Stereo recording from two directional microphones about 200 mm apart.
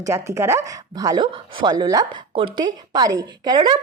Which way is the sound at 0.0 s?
15° right (ahead or behind).